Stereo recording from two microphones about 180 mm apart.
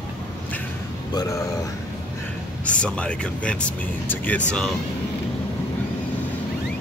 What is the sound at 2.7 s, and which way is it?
Speech, 5° left (ahead or behind).